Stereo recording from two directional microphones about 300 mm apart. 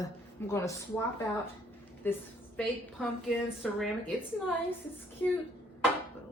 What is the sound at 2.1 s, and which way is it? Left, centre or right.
Speech, centre.